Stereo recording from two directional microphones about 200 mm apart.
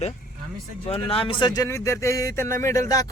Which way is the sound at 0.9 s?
30° left (ahead or behind).